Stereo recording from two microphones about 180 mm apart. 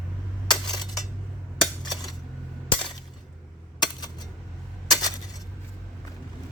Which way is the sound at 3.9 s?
25° left (ahead or behind).